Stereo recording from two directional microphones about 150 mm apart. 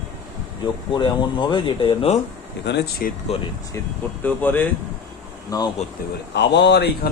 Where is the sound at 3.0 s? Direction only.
70° left (ahead or behind).